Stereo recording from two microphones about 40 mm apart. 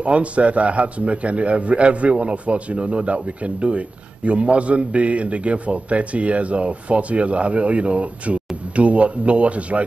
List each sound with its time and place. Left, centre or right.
0.0 s a man's voice: right